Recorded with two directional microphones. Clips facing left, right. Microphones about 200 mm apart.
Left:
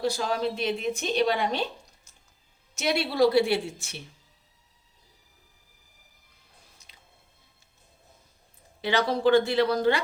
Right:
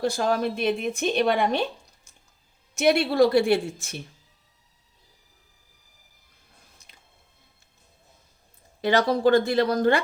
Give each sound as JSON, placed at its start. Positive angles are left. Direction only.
{"t": 0.0, "sound": "speech", "side_deg": -50}
{"t": 2.7, "sound": "speech", "side_deg": -55}
{"t": 8.8, "sound": "speech", "side_deg": -45}